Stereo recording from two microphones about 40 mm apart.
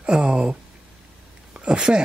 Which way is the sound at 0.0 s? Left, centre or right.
Right.